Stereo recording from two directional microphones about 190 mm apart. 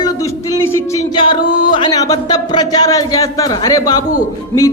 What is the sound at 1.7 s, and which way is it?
A man's voice, 20° left (ahead or behind).